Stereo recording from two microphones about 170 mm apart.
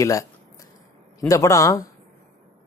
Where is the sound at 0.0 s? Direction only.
20° left (ahead or behind).